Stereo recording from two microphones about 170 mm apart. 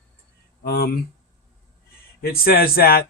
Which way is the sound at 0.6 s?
65° left (ahead or behind).